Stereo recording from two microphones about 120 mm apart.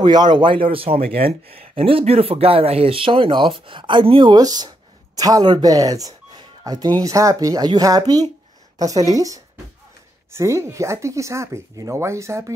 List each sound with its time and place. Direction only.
0.0 s speech: 35° right (ahead or behind)